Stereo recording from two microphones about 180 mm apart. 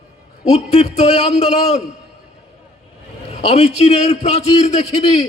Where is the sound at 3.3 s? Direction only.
35° left (ahead or behind).